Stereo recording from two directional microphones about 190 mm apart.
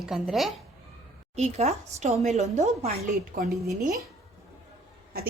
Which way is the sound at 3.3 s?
45° right (ahead or behind).